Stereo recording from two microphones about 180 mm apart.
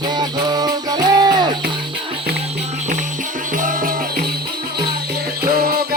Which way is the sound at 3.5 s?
50° right (ahead or behind).